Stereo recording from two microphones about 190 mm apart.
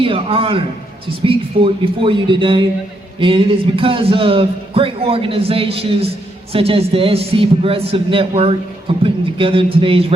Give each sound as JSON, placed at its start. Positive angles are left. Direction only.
{"t": 0.0, "sound": "a man's voice", "side_deg": -30}